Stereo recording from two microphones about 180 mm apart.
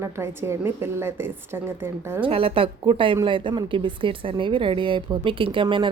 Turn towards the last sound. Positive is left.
turn(degrees=-30)  # may be behind; listen again after turning